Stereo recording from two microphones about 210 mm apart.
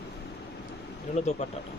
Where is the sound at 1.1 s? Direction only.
35° left (ahead or behind).